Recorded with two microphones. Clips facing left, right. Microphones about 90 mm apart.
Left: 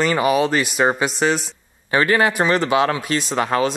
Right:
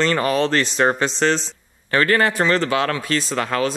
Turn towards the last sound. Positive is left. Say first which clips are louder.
# left 2 dB
turn(degrees=20)  # may be behind; listen again after turning